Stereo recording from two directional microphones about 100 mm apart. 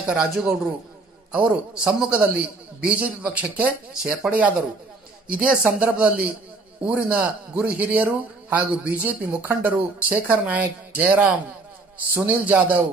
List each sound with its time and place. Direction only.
0.0 s a man's voice: 5° right (ahead or behind)